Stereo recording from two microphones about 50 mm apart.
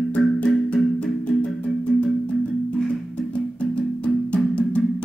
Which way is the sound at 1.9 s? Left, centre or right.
Centre.